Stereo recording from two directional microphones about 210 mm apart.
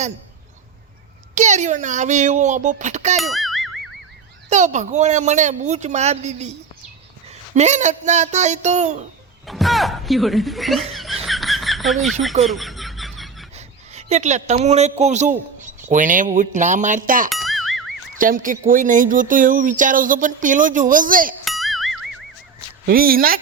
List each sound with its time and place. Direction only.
1.4 s speech: 35° right (ahead or behind)
3.2 s music: centre (ahead or behind)
4.4 s speech: 35° right (ahead or behind)
9.5 s speech: centre (ahead or behind)
11.3 s a sound: centre (ahead or behind)
13.6 s a man's voice: 30° right (ahead or behind)
17.2 s boing: centre (ahead or behind)
18.2 s speech: 40° right (ahead or behind)
21.4 s music: centre (ahead or behind)
22.9 s speech: 45° right (ahead or behind)